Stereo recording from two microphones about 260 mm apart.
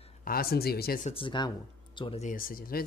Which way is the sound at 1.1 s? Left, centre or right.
Centre.